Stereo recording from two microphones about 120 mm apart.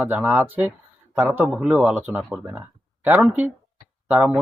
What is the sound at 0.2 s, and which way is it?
Speech, 15° right (ahead or behind).